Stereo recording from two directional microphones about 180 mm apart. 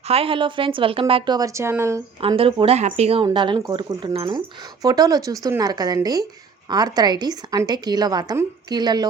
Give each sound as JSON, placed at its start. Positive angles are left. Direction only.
{"t": 0.1, "sound": "a woman's voice", "side_deg": -30}
{"t": 2.2, "sound": "a woman's voice", "side_deg": -30}